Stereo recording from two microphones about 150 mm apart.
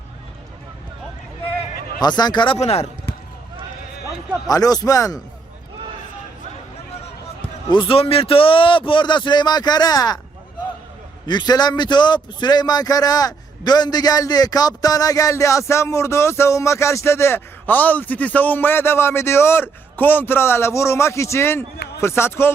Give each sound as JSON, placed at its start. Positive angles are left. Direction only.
{"t": 2.0, "sound": "a man's voice", "side_deg": 25}
{"t": 2.6, "sound": "speech", "side_deg": 45}
{"t": 4.4, "sound": "a man's voice", "side_deg": 25}
{"t": 7.7, "sound": "a man's voice", "side_deg": 35}
{"t": 11.3, "sound": "a man's voice", "side_deg": 30}